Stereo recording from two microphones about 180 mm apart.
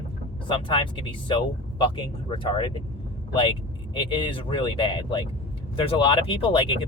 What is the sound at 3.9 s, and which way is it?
Speech, 25° left (ahead or behind).